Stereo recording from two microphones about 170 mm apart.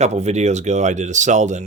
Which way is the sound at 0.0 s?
40° right (ahead or behind).